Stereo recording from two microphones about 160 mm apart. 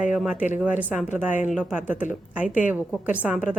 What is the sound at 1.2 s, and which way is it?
Speech, 50° left (ahead or behind).